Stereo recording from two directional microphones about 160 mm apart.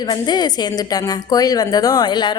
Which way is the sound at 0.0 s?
25° left (ahead or behind).